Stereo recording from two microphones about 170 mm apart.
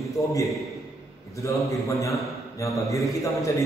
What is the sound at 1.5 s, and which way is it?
A man's voice, 20° left (ahead or behind).